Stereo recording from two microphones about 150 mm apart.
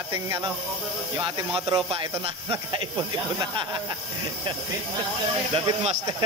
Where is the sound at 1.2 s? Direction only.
30° right (ahead or behind).